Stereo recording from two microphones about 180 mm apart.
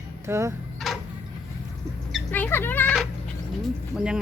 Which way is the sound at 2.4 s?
10° left (ahead or behind).